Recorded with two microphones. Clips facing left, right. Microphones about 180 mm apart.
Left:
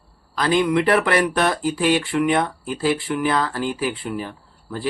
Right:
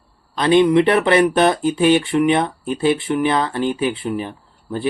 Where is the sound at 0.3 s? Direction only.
25° right (ahead or behind).